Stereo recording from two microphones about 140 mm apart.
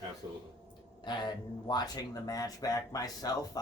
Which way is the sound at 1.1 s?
30° left (ahead or behind).